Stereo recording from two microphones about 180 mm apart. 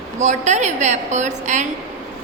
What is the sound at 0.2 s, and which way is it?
A woman's voice, 40° right (ahead or behind).